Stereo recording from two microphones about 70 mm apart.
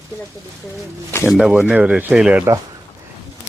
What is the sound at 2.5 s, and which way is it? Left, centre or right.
Speech, right.